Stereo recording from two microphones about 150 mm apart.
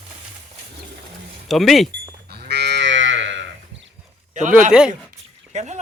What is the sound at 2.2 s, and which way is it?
Cattle, 90° right.